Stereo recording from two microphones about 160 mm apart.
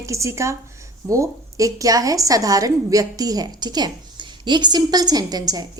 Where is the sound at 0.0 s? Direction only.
20° right (ahead or behind).